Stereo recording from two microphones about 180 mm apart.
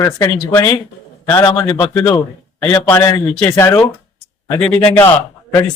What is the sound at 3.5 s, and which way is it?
A man's voice, 15° left (ahead or behind).